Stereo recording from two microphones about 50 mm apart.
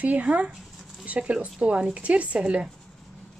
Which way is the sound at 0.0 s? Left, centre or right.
Right.